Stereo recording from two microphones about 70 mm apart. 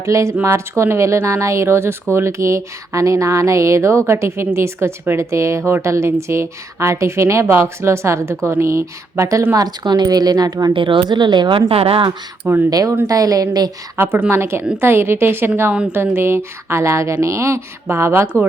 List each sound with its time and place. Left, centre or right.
0.0 s speech: right
9.6 s speech: right
11.1 s speech: right
12.7 s a woman's voice: right
13.9 s speech: right